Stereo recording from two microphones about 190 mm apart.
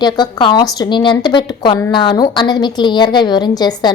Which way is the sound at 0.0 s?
25° left (ahead or behind).